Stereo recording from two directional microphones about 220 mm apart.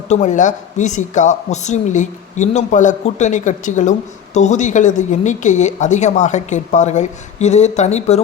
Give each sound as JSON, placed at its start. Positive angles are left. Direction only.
{"t": 0.1, "sound": "speech", "side_deg": 35}